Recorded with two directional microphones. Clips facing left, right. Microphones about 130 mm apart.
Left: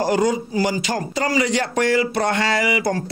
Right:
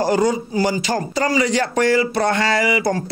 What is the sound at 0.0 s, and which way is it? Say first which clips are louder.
Speech: right 1 dB; 35° right (ahead or behind).